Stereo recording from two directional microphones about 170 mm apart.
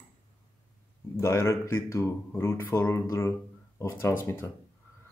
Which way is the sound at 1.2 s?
15° left (ahead or behind).